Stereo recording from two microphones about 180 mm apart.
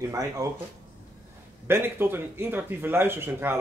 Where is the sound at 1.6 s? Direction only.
15° right (ahead or behind).